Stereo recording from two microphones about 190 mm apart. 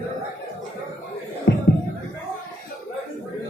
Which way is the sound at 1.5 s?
65° left (ahead or behind).